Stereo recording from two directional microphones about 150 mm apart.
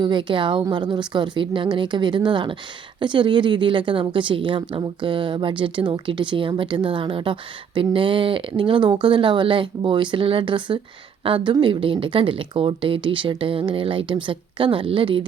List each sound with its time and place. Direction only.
0.0 s a woman's voice: 30° right (ahead or behind)